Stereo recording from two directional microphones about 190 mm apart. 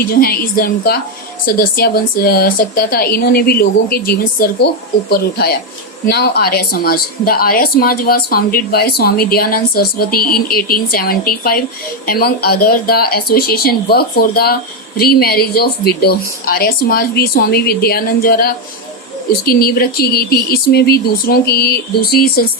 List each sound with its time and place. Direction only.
0.0 s speech: 50° left (ahead or behind)